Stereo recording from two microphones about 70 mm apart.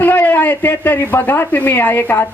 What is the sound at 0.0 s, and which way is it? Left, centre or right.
Speech, left.